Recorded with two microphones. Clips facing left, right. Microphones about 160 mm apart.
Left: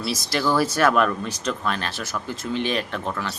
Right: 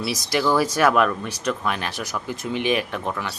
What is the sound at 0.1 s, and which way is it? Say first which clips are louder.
Speech: right 1 dB; 15° right (ahead or behind).